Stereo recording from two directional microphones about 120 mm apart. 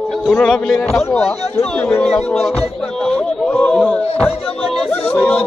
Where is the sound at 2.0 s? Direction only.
Centre (ahead or behind).